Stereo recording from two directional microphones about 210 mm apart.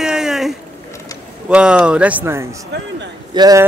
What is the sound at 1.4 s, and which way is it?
Speech, 5° right (ahead or behind).